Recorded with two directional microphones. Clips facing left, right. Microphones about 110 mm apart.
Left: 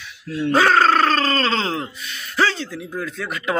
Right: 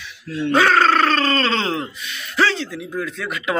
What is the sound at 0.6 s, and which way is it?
Grunt, 30° left (ahead or behind).